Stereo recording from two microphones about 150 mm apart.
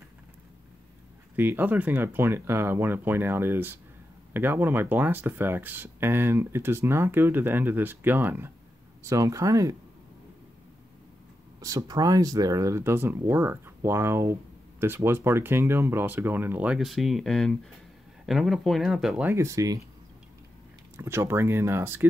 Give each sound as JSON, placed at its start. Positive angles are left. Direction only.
{"t": 1.3, "sound": "speech", "side_deg": -15}
{"t": 11.6, "sound": "speech", "side_deg": -25}
{"t": 19.3, "sound": "speech", "side_deg": -20}
{"t": 20.9, "sound": "speech", "side_deg": -15}